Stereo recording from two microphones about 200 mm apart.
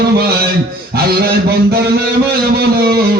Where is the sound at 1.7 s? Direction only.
50° right (ahead or behind).